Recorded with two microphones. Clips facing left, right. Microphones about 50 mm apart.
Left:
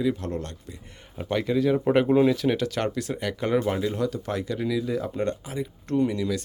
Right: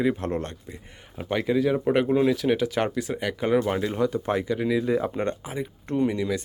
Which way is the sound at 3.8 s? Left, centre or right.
Right.